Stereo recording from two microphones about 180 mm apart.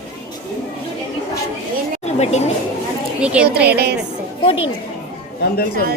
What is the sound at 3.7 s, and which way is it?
Speech, 65° right (ahead or behind).